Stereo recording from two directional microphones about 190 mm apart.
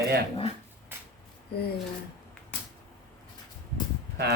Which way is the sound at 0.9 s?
10° right (ahead or behind).